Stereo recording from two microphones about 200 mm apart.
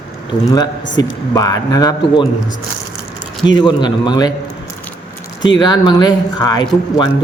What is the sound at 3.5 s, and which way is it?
Speech, 20° left (ahead or behind).